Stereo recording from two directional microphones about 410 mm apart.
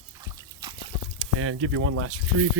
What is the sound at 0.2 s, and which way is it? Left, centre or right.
Trickle, centre.